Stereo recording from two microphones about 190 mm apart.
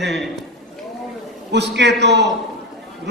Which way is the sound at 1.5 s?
65° right (ahead or behind).